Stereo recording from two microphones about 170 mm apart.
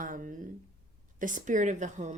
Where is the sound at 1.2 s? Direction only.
45° right (ahead or behind).